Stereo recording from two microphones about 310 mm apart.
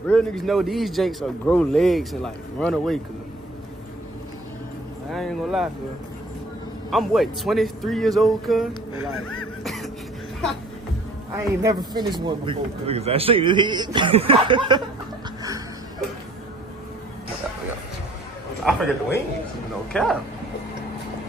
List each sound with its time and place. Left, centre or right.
0.0 s speech: centre
5.1 s speech: centre
6.9 s speech: centre
9.6 s music: centre
11.3 s a man's voice: centre
18.6 s speech: centre